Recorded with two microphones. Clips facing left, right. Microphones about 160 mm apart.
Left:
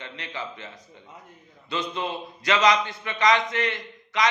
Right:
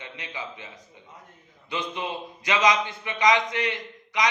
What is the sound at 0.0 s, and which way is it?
A man's voice, 15° right (ahead or behind).